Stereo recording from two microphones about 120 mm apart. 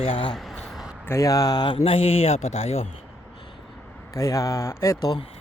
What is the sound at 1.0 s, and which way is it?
A man's voice, 25° left (ahead or behind).